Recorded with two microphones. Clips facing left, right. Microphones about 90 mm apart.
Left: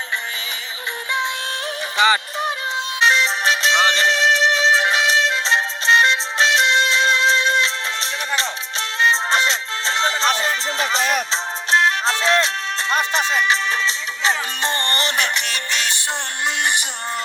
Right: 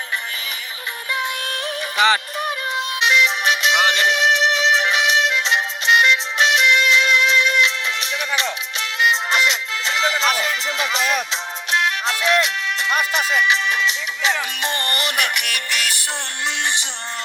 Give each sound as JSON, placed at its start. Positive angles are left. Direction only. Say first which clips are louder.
{"t": 3.0, "sound": "music", "louder": "left 1 dB", "side_deg": 35}